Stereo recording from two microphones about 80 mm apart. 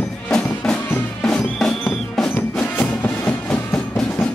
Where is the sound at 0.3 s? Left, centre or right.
Centre.